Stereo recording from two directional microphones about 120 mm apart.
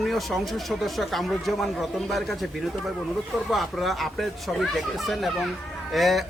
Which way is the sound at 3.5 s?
Centre (ahead or behind).